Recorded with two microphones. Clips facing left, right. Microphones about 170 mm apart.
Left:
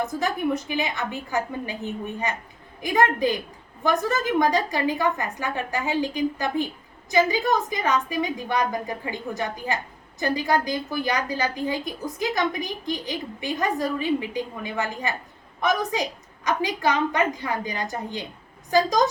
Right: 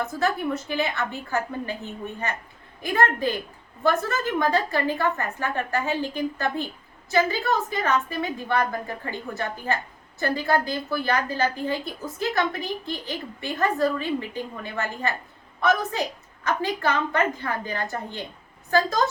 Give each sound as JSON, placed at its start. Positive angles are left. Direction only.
{"t": 0.0, "sound": "a woman's voice", "side_deg": 15}